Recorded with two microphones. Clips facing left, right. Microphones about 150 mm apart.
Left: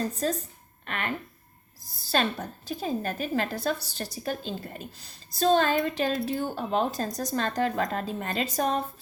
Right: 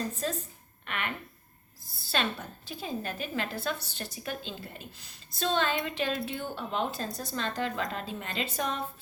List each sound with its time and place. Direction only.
0.1 s a woman's voice: 40° left (ahead or behind)